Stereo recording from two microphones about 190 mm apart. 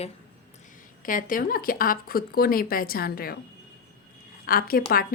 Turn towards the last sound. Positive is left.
turn(degrees=50)  # may be behind; listen again after turning